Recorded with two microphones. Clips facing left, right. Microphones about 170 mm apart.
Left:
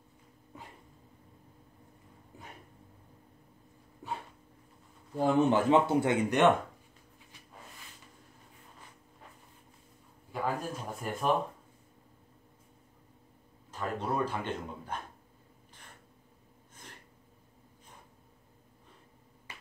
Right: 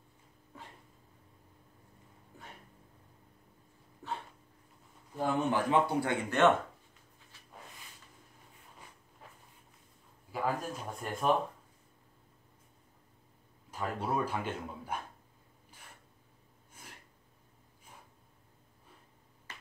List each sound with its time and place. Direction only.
4.0 s a sound: 15° left (ahead or behind)
5.1 s speech: 25° left (ahead or behind)
10.3 s speech: centre (ahead or behind)
13.7 s a man's voice: 10° right (ahead or behind)